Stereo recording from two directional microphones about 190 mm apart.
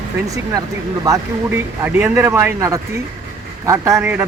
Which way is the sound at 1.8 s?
10° right (ahead or behind).